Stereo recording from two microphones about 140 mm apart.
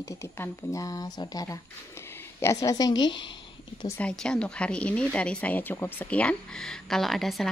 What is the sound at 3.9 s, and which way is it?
Speech, 5° left (ahead or behind).